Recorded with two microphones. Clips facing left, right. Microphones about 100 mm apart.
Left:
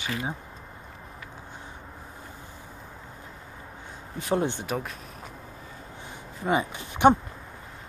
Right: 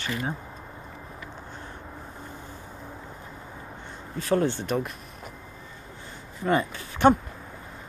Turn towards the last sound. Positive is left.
turn(degrees=15)  # may be behind; listen again after turning